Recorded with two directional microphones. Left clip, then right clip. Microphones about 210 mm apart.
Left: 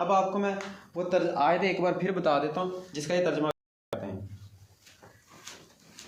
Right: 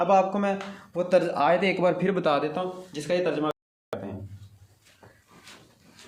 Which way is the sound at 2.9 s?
10° right (ahead or behind).